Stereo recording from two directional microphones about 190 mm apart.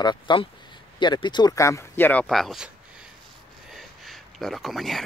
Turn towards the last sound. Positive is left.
turn(degrees=0)  # may be behind; listen again after turning